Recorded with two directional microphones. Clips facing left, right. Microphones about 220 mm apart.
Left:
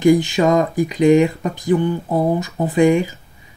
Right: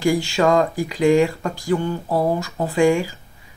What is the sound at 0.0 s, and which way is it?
Speech, 20° left (ahead or behind).